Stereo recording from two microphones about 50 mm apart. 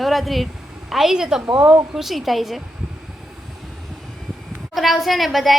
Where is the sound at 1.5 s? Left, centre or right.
Right.